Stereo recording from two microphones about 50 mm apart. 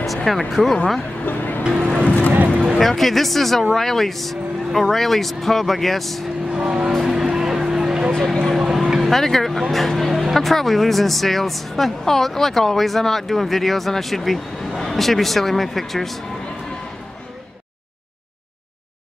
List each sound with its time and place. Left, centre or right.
0.0 s speech: centre
1.2 s music: left
2.0 s vehicle: left
2.3 s a sound: right
2.8 s speech: centre
6.5 s vehicle: centre
7.0 s music: centre
8.5 s vehicle: centre
9.1 s speech: centre